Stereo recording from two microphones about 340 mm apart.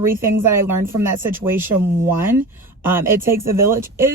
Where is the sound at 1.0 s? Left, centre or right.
Centre.